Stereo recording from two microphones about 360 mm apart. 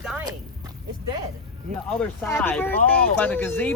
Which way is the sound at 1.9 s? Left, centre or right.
Centre.